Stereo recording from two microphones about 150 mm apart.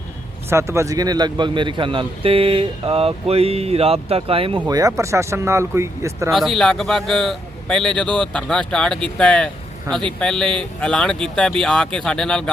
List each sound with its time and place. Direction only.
0.5 s a man's voice: 20° right (ahead or behind); by 4.6 s 40° right (ahead or behind)
4.7 s speech: 25° right (ahead or behind)
6.3 s a man's voice: centre (ahead or behind)